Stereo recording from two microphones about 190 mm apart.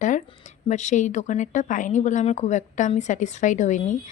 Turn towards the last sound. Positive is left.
turn(degrees=40)  # may be behind; listen again after turning